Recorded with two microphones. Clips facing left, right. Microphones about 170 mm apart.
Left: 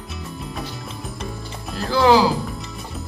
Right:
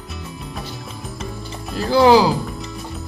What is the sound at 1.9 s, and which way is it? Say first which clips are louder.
Speech: right 3 dB; 15° right (ahead or behind).